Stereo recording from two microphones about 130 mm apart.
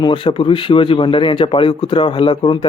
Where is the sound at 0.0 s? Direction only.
35° left (ahead or behind).